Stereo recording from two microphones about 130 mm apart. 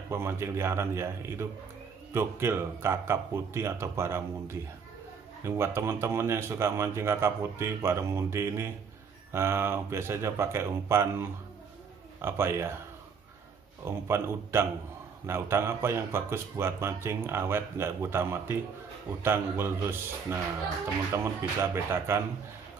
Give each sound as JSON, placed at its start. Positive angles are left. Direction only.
{"t": 0.1, "sound": "a man's voice", "side_deg": -20}
{"t": 13.8, "sound": "a man's voice", "side_deg": -20}